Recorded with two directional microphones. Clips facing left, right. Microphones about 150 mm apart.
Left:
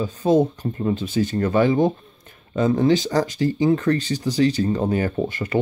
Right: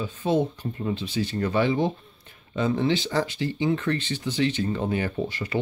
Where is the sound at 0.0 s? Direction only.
40° left (ahead or behind).